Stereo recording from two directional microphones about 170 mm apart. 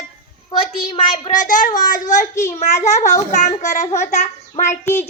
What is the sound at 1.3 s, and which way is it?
A child's voice, 50° left (ahead or behind).